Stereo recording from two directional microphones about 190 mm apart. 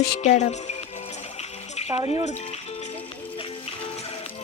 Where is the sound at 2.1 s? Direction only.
35° left (ahead or behind).